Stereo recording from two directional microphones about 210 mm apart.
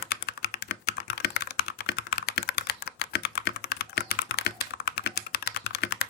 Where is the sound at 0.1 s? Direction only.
50° left (ahead or behind).